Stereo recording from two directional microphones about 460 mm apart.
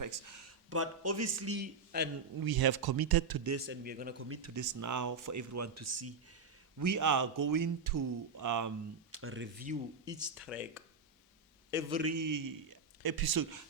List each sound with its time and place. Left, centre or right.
0.0 s speech: right
2.4 s speech: right
3.5 s speech: right
9.1 s speech: right
10.3 s a man's voice: centre
12.0 s speech: right